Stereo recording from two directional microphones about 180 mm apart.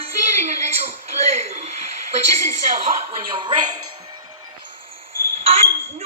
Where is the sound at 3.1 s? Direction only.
30° right (ahead or behind).